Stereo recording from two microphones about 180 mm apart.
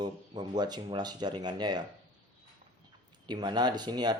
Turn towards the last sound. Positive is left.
turn(degrees=-25)  # may be behind; listen again after turning